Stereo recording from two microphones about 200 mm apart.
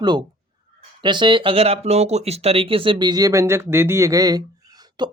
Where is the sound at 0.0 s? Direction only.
20° right (ahead or behind).